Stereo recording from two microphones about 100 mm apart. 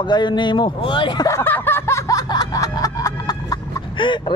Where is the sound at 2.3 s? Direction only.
40° left (ahead or behind).